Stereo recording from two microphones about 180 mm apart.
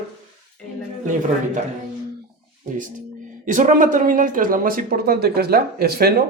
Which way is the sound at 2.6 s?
45° right (ahead or behind).